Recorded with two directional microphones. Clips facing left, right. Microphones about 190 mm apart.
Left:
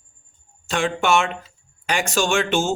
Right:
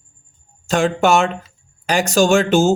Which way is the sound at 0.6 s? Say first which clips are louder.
Right 5 dB; 40° right (ahead or behind).